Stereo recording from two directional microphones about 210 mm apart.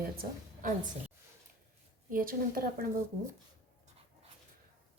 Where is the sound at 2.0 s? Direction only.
40° right (ahead or behind).